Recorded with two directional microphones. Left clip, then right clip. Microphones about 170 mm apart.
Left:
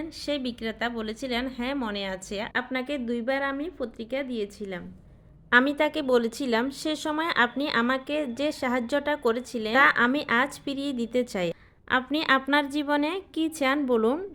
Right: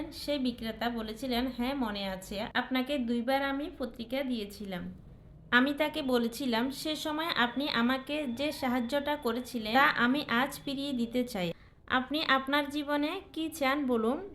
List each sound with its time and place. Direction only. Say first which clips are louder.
0.3 s a woman's voice: left 3 dB; 50° left (ahead or behind)